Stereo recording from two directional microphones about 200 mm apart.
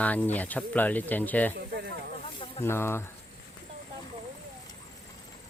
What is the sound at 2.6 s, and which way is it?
Speech, 10° left (ahead or behind).